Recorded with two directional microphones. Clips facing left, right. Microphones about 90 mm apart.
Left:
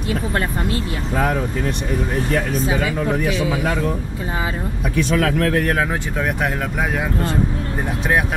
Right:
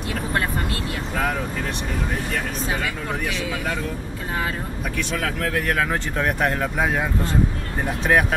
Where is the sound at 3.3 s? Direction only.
10° left (ahead or behind).